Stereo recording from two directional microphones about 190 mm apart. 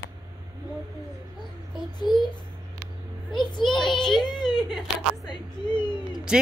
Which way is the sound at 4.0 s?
Centre (ahead or behind).